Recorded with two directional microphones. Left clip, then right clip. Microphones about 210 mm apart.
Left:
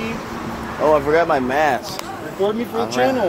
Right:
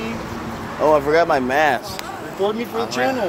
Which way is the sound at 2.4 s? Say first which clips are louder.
Left 1 dB; 25° left (ahead or behind).